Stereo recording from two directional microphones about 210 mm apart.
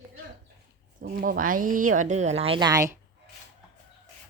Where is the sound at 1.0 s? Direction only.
45° right (ahead or behind); by 2.9 s 15° right (ahead or behind).